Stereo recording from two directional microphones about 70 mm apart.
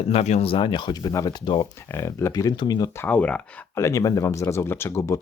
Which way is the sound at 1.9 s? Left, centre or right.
Left.